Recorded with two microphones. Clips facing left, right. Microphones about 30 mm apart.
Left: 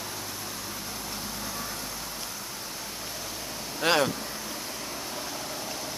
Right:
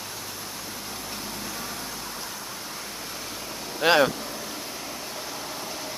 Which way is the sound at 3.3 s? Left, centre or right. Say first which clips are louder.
Right 2 dB; centre.